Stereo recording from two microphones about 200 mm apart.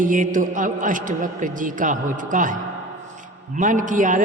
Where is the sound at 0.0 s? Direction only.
40° right (ahead or behind).